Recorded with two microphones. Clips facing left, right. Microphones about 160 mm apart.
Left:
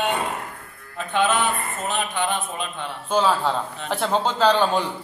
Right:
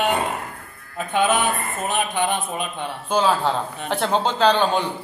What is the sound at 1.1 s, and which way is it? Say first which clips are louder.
Speech: right 1 dB; 15° right (ahead or behind).